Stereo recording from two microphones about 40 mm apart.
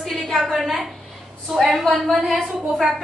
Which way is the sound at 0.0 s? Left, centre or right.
Centre.